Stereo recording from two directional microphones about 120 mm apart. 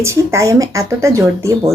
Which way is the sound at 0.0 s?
25° right (ahead or behind).